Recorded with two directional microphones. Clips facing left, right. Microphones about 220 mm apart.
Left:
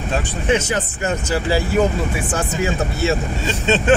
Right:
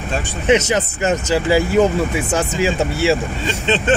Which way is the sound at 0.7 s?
90° right.